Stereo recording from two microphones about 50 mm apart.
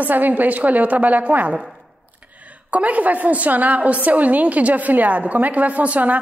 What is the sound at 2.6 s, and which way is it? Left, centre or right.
A woman's voice, right.